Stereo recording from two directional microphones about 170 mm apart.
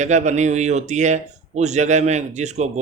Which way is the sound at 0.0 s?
45° right (ahead or behind).